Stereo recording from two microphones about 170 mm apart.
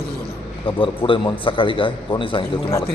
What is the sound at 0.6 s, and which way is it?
A man's voice, 30° left (ahead or behind).